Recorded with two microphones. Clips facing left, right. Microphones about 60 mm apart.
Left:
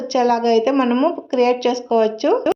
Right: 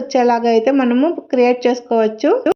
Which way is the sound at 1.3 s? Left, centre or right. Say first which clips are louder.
Right 4 dB; right.